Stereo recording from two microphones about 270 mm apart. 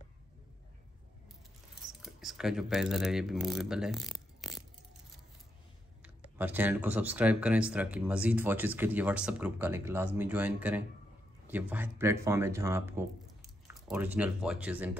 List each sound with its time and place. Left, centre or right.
1.9 s speech: centre
6.0 s speech: centre